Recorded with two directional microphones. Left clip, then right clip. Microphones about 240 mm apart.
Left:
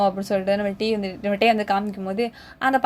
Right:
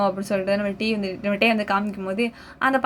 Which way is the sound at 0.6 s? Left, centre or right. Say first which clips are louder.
Left 1 dB; left.